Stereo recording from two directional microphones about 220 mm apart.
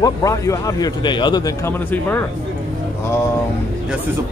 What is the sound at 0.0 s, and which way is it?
A man's voice, 15° left (ahead or behind).